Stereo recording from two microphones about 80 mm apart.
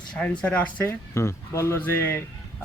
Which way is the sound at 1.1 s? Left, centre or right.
Left.